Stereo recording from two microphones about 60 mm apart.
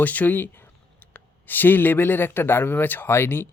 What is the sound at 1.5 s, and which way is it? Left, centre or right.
Speech, left.